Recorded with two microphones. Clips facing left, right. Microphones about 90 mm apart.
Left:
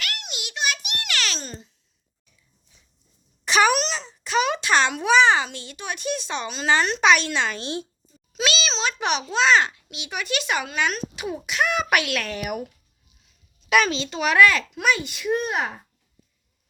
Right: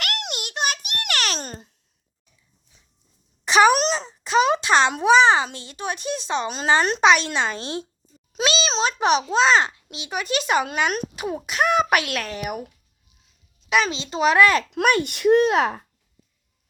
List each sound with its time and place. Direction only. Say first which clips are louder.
0.0 s child singing: right 5 dB; 70° right (ahead or behind)
0.3 s a sound: left 1 dB; 50° right (ahead or behind)
3.4 s wail: right 3 dB; 25° right (ahead or behind)
3.8 s a sound: right 4 dB; 40° right (ahead or behind)
4.2 s a child's voice: right 4 dB; 30° right (ahead or behind)
8.4 s a sound: right 3 dB; 35° right (ahead or behind)
8.7 s a child's voice: right 5 dB; 35° right (ahead or behind)
13.7 s a child's voice: left 1 dB; 25° right (ahead or behind)
14.7 s a child's voice: right 4 dB; 60° right (ahead or behind); by 15.8 s 90° right